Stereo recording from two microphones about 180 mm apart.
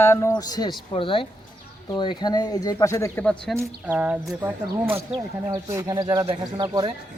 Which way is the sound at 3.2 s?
5° left (ahead or behind).